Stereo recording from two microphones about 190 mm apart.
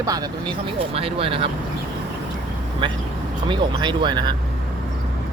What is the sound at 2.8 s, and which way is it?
Speech, 25° right (ahead or behind).